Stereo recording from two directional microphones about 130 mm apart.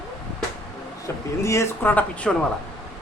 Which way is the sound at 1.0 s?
25° left (ahead or behind).